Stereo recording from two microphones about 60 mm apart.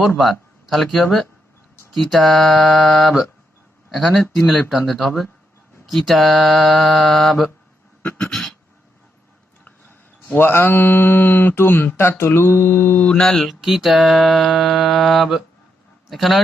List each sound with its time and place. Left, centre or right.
0.2 s speech: centre
1.9 s music: centre
10.3 s speech: left
13.1 s mantra: centre
13.5 s music: centre
16.0 s a man's voice: centre